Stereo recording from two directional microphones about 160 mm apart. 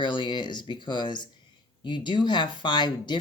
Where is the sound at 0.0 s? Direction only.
30° left (ahead or behind).